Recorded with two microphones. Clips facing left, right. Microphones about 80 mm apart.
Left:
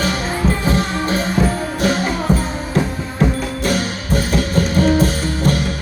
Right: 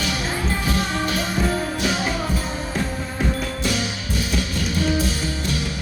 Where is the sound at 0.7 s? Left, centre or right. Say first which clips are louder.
Left 5 dB; left.